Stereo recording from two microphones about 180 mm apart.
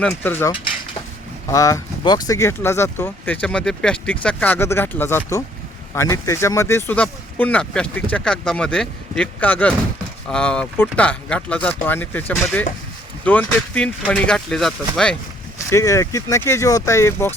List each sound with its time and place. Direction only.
0.0 s speech: 10° left (ahead or behind)
15.5 s speech: 15° left (ahead or behind)